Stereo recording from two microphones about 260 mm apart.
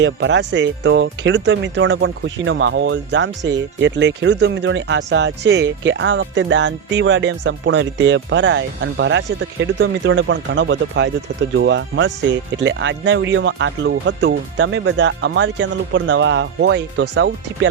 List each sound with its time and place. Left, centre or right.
0.0 s speech: right